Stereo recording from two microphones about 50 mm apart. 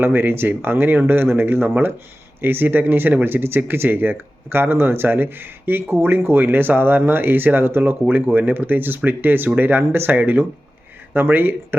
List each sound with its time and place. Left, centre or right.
0.0 s speech: right
3.8 s speech: right
10.1 s speech: right